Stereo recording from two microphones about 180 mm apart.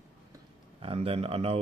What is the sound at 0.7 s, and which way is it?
Speech, 30° right (ahead or behind).